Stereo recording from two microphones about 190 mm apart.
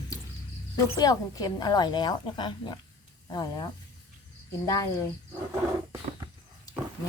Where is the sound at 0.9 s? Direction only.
20° left (ahead or behind).